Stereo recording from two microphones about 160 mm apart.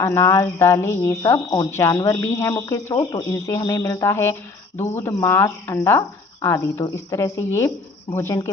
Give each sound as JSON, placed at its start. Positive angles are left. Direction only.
{"t": 0.0, "sound": "speech", "side_deg": 20}